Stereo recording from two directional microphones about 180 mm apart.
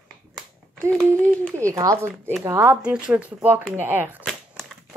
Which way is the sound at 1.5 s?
15° right (ahead or behind).